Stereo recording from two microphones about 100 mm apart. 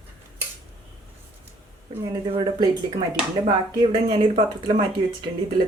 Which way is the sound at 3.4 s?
50° right (ahead or behind).